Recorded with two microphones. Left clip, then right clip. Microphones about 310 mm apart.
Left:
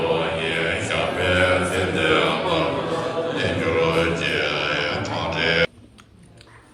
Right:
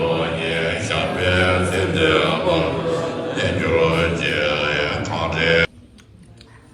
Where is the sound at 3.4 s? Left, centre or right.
Right.